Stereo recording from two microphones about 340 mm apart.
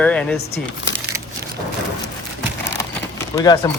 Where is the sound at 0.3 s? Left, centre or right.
Left.